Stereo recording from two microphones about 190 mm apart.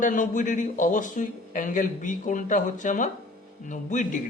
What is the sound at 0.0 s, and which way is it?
A man's voice, 45° left (ahead or behind).